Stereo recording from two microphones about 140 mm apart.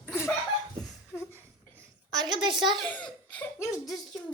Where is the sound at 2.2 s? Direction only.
35° right (ahead or behind).